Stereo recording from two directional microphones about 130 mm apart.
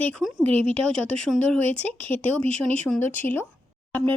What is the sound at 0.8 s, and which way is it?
Speech, 5° left (ahead or behind).